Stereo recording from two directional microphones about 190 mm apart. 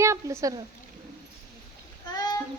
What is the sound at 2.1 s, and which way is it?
Cat, 20° left (ahead or behind).